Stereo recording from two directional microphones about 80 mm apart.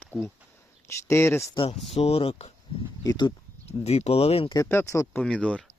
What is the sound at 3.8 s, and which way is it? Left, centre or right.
Speech, left.